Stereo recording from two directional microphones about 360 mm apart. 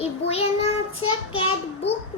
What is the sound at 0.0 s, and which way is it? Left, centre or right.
Child singing, centre.